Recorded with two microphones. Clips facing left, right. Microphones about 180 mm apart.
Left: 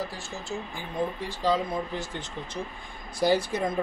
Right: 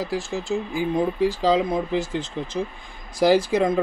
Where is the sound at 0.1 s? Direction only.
90° right.